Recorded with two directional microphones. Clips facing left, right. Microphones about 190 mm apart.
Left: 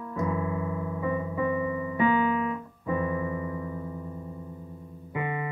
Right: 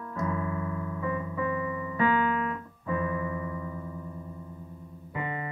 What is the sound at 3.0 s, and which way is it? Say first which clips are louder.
Electric piano: left 2 dB; 25° left (ahead or behind).